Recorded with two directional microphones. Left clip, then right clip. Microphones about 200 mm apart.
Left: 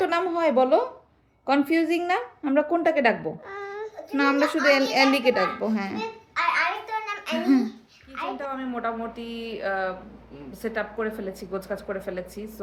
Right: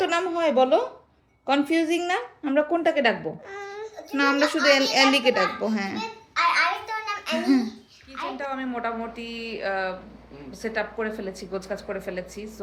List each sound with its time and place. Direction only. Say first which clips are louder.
0.0 s a woman's voice: even; 5° left (ahead or behind)
3.5 s baby cry: left 1 dB; 25° left (ahead or behind)
4.1 s a woman's voice: right 1 dB; centre (ahead or behind)
6.0 s a sound: right 6 dB; 15° left (ahead or behind)
7.3 s a woman's voice: left 1 dB; 5° right (ahead or behind)